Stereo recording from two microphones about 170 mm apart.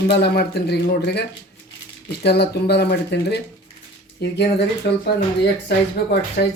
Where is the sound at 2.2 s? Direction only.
75° left (ahead or behind).